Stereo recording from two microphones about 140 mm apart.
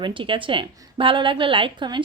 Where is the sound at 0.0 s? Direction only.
35° right (ahead or behind).